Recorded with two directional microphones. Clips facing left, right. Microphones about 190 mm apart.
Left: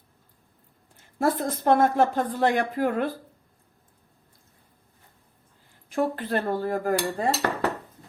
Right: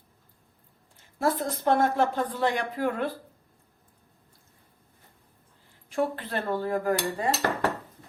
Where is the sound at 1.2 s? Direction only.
50° left (ahead or behind).